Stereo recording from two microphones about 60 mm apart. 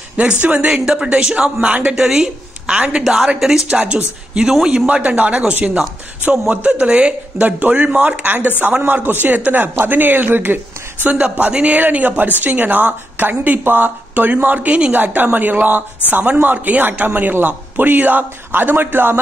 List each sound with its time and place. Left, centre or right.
0.2 s a man's voice: right; by 3.6 s centre
3.6 s a man's voice: centre; by 19.1 s right